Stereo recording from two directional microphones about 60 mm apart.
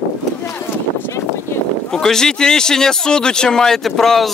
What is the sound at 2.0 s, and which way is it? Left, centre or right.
Speech, centre.